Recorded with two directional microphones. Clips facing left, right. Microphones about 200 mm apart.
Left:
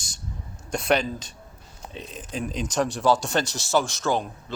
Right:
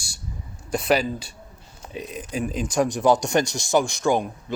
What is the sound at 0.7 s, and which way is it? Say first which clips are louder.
Speech: right 2 dB; 5° right (ahead or behind).